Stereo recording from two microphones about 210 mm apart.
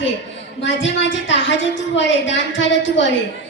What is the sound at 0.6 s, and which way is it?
Speech, 60° left (ahead or behind).